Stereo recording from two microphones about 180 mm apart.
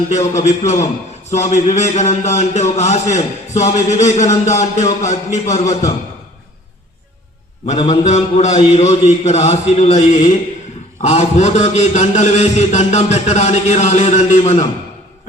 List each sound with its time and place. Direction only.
0.1 s a man's voice: 40° left (ahead or behind)
7.7 s a man's voice: 40° left (ahead or behind)